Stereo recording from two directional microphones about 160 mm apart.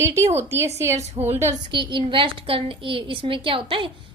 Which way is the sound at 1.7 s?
30° right (ahead or behind).